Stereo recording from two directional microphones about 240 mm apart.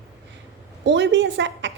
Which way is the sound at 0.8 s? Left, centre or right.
Right.